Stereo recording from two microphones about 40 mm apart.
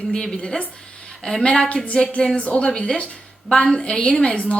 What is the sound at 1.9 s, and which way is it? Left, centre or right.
Speech, left.